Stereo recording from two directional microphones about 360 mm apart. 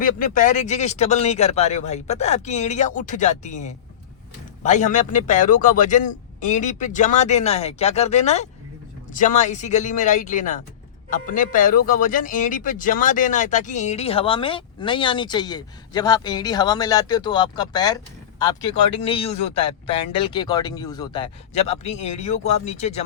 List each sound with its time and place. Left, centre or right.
0.0 s a man's voice: left